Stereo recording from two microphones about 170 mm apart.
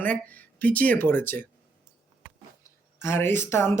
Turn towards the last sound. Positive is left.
turn(degrees=15)  # may be behind; listen again after turning